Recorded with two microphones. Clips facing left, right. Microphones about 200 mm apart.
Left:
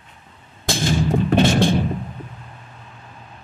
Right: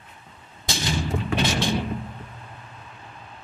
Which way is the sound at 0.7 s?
50° left (ahead or behind).